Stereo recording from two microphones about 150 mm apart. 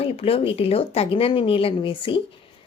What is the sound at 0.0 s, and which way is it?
A woman's voice, 40° left (ahead or behind).